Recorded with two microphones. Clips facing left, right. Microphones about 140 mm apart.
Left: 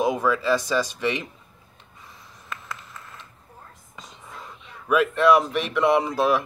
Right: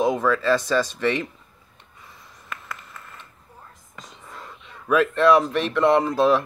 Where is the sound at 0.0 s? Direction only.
5° left (ahead or behind).